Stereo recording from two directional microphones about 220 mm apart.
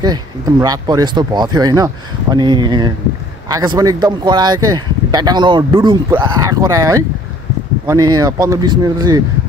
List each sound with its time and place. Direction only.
0.0 s speech: 15° right (ahead or behind)